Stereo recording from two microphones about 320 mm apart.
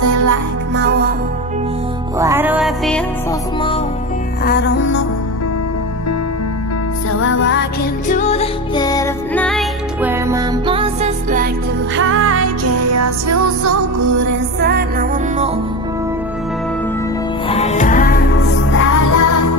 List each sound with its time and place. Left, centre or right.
0.0 s music: right
0.7 s music: right
2.1 s music: centre
4.5 s music: left
7.1 s music: left
8.1 s music: left; by 11.5 s right
12.0 s music: right
14.6 s music: right
17.5 s music: left
18.9 s music: left